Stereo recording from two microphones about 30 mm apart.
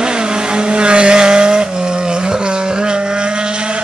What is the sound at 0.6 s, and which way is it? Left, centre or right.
Vehicle, right.